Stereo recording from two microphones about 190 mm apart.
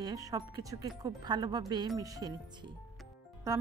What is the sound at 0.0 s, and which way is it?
Speech, 20° right (ahead or behind).